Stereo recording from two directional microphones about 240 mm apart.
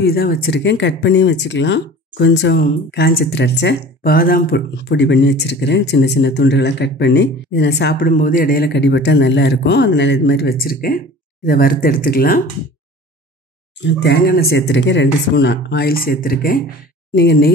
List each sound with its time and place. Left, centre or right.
0.0 s speech: left
8.1 s speech: left
13.8 s speech: left